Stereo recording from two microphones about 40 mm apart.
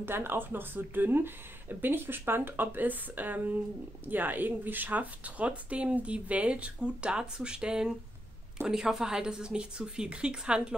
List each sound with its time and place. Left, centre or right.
0.0 s a woman's voice: right